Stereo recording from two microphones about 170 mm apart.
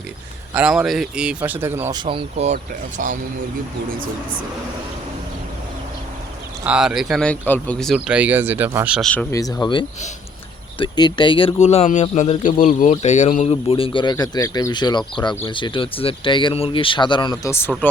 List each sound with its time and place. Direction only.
0.5 s speech: 5° right (ahead or behind); by 2.6 s 35° right (ahead or behind)
3.0 s speech: 50° right (ahead or behind)
6.7 s speech: 5° right (ahead or behind)
9.0 s speech: 5° left (ahead or behind)
9.3 s speech: 20° left (ahead or behind)
17.4 s speech: 15° left (ahead or behind)